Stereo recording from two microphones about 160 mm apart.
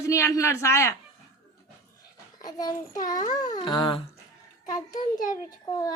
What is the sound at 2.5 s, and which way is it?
Speech, 20° left (ahead or behind).